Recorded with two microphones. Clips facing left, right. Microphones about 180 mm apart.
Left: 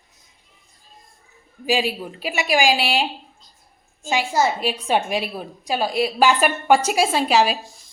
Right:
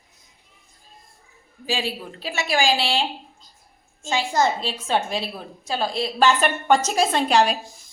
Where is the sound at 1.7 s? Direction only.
15° left (ahead or behind).